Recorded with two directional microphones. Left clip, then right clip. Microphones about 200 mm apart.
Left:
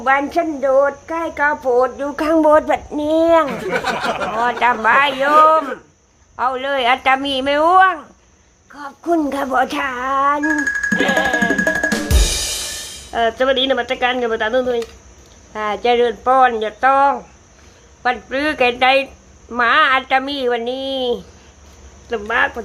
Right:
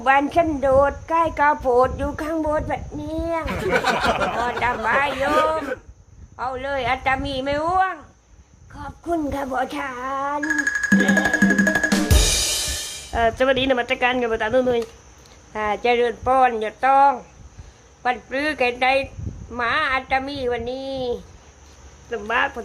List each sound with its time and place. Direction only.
0.0 s a woman's voice: 5° right (ahead or behind)
2.1 s a woman's voice: 10° left (ahead or behind)
11.5 s drum: centre (ahead or behind)
15.5 s speech: centre (ahead or behind)